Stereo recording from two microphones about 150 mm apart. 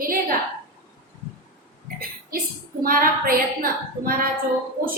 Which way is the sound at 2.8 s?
70° right (ahead or behind).